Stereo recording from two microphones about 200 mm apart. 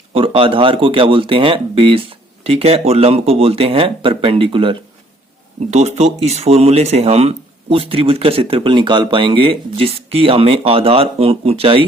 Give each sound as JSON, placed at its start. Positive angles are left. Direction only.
{"t": 0.1, "sound": "speech", "side_deg": -25}